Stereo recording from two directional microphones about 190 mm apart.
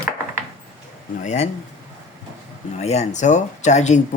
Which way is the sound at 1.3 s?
35° left (ahead or behind).